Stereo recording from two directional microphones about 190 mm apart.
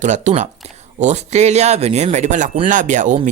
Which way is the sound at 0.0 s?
40° right (ahead or behind).